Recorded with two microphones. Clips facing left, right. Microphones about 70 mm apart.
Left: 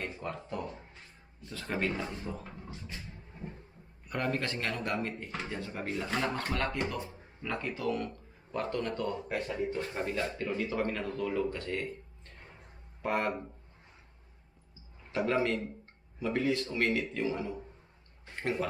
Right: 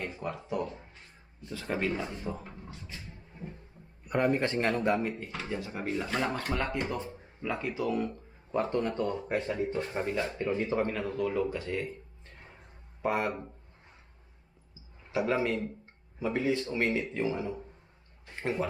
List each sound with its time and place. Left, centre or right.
0.0 s speech: centre
4.1 s speech: centre
6.6 s speech: centre
7.4 s speech: centre
10.0 s speech: centre
10.2 s speech: right
10.9 s speech: centre
13.0 s speech: centre
15.1 s speech: centre